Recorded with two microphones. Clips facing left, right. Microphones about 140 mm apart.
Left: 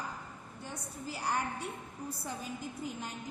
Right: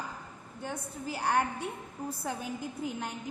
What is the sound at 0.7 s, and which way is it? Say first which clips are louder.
Speech: right 5 dB; 65° right (ahead or behind).